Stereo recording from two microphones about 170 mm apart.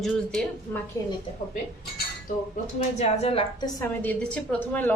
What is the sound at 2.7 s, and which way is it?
Speech, 40° left (ahead or behind).